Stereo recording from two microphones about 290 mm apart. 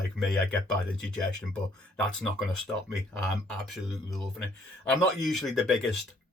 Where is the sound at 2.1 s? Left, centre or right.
Centre.